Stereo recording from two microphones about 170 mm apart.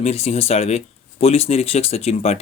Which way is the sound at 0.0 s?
40° left (ahead or behind).